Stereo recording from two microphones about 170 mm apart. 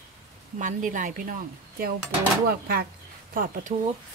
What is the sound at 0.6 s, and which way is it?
Speech, 50° right (ahead or behind).